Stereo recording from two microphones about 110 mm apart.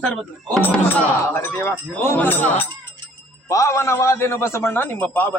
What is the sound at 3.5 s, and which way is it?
A man's voice, 30° left (ahead or behind).